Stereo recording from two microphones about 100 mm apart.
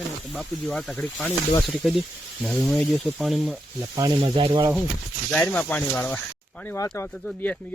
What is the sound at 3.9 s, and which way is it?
Speech, 40° right (ahead or behind).